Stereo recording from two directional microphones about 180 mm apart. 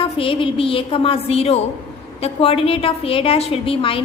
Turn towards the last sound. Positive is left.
turn(degrees=30)  # may be behind; listen again after turning